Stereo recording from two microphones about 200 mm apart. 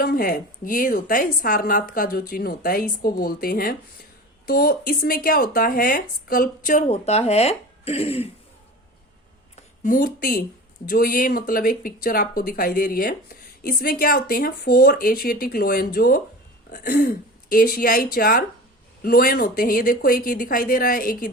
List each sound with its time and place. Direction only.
0.0 s speech: 50° left (ahead or behind); by 8.3 s 30° left (ahead or behind)
9.6 s speech: 40° left (ahead or behind)